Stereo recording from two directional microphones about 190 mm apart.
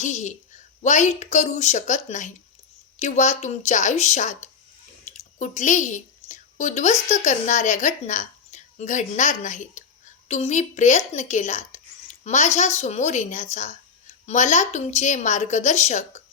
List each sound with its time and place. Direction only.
0.0 s a woman's voice: 40° left (ahead or behind)